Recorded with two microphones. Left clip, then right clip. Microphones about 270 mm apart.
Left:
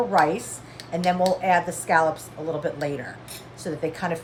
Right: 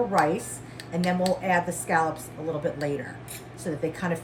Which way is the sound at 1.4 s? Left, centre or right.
Centre.